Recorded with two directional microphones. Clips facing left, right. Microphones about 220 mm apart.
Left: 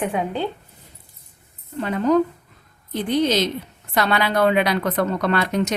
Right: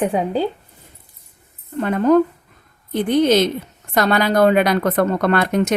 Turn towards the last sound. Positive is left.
turn(degrees=-50)  # may be behind; listen again after turning